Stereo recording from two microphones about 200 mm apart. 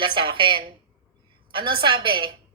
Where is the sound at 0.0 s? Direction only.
25° right (ahead or behind).